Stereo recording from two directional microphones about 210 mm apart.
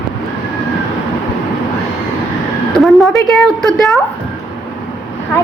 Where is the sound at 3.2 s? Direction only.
Centre (ahead or behind).